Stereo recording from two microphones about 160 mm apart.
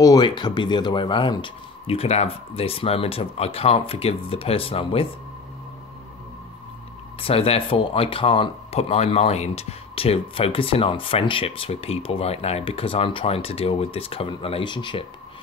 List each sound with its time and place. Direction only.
0.0 s speech: 25° left (ahead or behind)
7.2 s speech: 35° left (ahead or behind)